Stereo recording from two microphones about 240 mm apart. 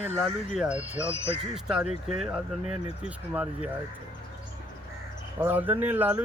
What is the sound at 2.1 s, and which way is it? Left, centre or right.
Speech, centre.